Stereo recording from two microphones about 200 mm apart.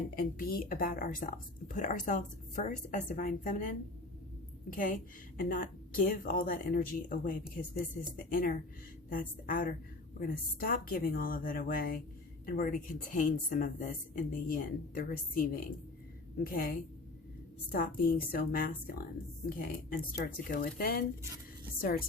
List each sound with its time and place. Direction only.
0.2 s a woman's voice: 45° left (ahead or behind)
4.7 s a woman's voice: 40° left (ahead or behind)